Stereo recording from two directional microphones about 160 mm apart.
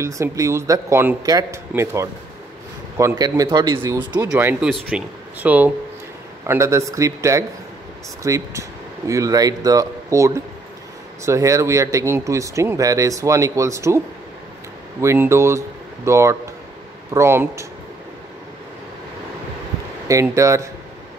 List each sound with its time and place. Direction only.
0.0 s speech: 20° right (ahead or behind)
3.2 s speech: 25° right (ahead or behind)
4.2 s speech: 15° right (ahead or behind)
4.6 s speech: centre (ahead or behind)
5.4 s speech: 10° right (ahead or behind)
20.1 s speech: 20° right (ahead or behind)